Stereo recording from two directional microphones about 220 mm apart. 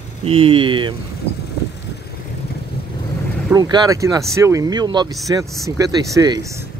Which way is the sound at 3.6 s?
20° right (ahead or behind).